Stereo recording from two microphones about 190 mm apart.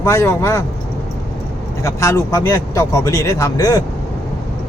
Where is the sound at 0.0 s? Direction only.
15° left (ahead or behind).